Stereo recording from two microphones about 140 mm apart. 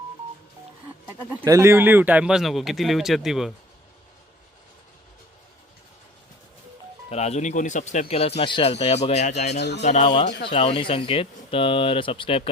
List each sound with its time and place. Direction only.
1.5 s speech: 20° right (ahead or behind); by 3.5 s centre (ahead or behind)
7.1 s speech: 50° left (ahead or behind)
10.5 s speech: 45° left (ahead or behind)